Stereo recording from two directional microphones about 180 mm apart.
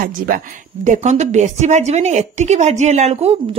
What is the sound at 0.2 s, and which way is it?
A woman's voice, 50° right (ahead or behind).